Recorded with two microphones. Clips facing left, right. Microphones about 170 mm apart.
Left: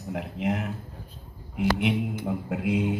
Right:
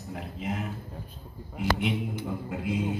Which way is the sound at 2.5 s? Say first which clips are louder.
Left 5 dB; 70° left (ahead or behind).